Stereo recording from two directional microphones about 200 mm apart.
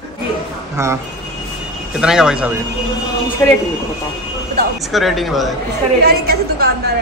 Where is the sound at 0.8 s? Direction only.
15° right (ahead or behind).